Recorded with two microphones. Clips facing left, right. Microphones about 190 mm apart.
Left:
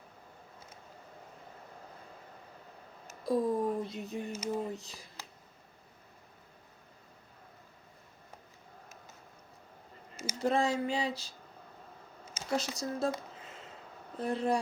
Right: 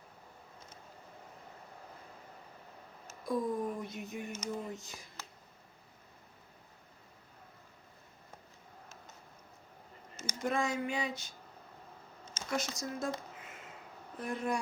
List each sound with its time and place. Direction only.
3.2 s speech: 35° left (ahead or behind)
10.2 s speech: 30° left (ahead or behind)
12.5 s speech: 35° left (ahead or behind)
14.2 s speech: 30° left (ahead or behind)